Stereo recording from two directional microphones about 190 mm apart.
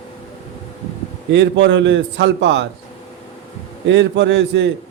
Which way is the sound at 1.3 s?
70° right (ahead or behind).